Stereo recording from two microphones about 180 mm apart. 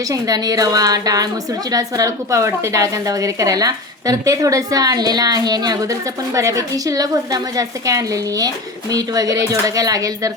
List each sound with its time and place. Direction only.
0.1 s a woman's voice: 20° right (ahead or behind)